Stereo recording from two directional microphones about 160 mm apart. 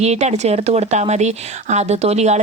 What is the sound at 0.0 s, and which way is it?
Speech, 45° right (ahead or behind).